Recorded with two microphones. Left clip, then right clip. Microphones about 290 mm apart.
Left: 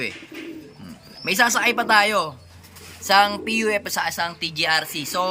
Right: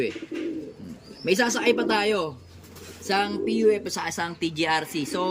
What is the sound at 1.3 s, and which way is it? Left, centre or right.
Speech, centre.